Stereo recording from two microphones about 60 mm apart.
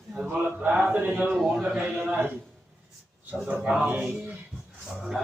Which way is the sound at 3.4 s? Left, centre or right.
Right.